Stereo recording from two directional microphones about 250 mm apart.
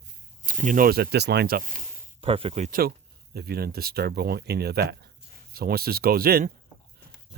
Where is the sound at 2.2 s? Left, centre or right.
Right.